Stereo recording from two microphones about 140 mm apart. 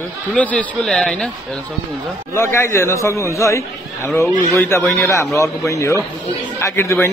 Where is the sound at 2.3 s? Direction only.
15° left (ahead or behind).